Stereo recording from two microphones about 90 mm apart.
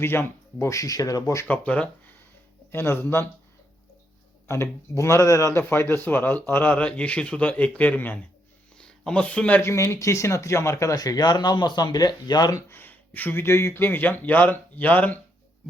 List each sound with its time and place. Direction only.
0.0 s speech: 25° left (ahead or behind)
1.5 s speech: 15° left (ahead or behind)
2.7 s speech: 30° left (ahead or behind)
4.4 s speech: 30° left (ahead or behind); by 9.6 s 15° left (ahead or behind)
9.6 s speech: 30° left (ahead or behind)
12.7 s speech: 20° left (ahead or behind)